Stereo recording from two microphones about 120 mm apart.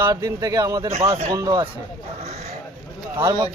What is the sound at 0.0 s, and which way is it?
Speech, 30° right (ahead or behind).